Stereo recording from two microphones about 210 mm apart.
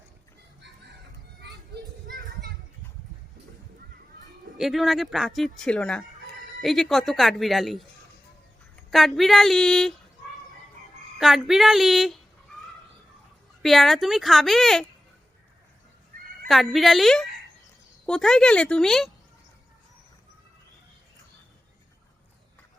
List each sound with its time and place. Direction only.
1.4 s children playing: 55° right (ahead or behind)
4.5 s speech: centre (ahead or behind)
8.9 s speech: centre (ahead or behind)
11.2 s speech: centre (ahead or behind)
13.6 s speech: centre (ahead or behind)
16.5 s speech: centre (ahead or behind)